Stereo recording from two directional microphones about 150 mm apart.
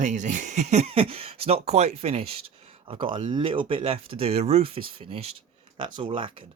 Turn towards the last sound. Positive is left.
turn(degrees=-35)  # may be behind; listen again after turning